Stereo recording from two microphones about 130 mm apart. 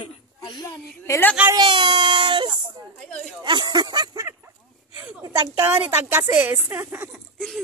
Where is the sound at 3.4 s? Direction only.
35° right (ahead or behind).